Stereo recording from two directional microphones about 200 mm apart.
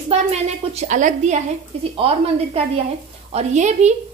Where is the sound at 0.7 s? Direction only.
40° right (ahead or behind).